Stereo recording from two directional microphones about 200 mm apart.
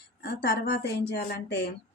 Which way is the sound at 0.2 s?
50° left (ahead or behind).